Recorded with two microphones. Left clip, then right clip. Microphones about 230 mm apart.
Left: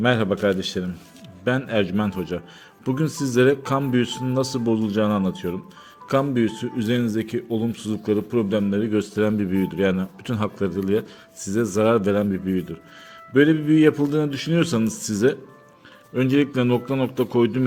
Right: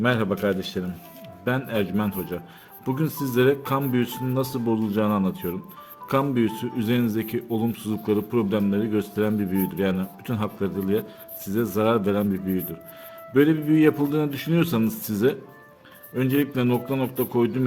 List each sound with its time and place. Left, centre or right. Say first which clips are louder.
0.0 s speech: left 3 dB; centre